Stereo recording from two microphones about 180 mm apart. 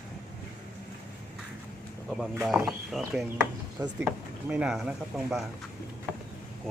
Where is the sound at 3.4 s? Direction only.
15° right (ahead or behind).